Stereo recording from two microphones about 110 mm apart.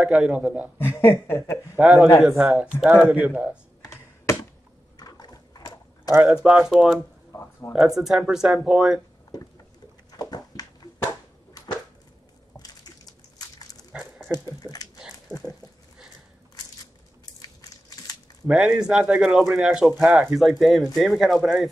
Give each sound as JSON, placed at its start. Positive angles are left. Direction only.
{"t": 0.0, "sound": "speech", "side_deg": -10}
{"t": 0.7, "sound": "speech", "side_deg": 20}
{"t": 1.8, "sound": "speech", "side_deg": -10}
{"t": 3.2, "sound": "speech", "side_deg": -15}
{"t": 3.8, "sound": "computer keyboard", "side_deg": 30}
{"t": 4.9, "sound": "a sound", "side_deg": 35}
{"t": 6.2, "sound": "speech", "side_deg": -5}
{"t": 9.3, "sound": "a sound", "side_deg": 35}
{"t": 12.5, "sound": "bird", "side_deg": 35}
{"t": 13.9, "sound": "dog", "side_deg": -5}
{"t": 14.3, "sound": "speech", "side_deg": 35}
{"t": 17.6, "sound": "crushing", "side_deg": 35}
{"t": 18.5, "sound": "speech", "side_deg": -5}